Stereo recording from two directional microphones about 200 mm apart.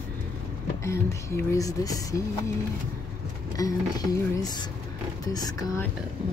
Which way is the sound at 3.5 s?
20° left (ahead or behind).